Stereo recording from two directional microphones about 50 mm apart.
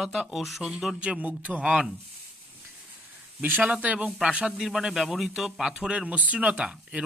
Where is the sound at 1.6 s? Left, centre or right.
Centre.